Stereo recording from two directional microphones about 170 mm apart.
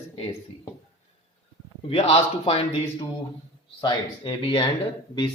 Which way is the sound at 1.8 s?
35° left (ahead or behind).